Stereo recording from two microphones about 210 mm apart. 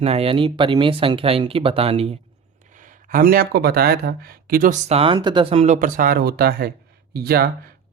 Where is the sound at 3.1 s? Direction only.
45° right (ahead or behind).